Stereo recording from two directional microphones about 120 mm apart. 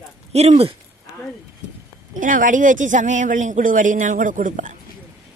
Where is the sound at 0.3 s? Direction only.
60° right (ahead or behind).